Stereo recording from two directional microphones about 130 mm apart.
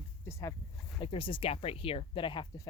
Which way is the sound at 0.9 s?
40° left (ahead or behind).